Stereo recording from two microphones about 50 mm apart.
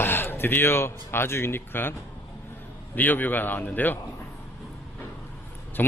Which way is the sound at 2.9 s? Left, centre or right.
Left.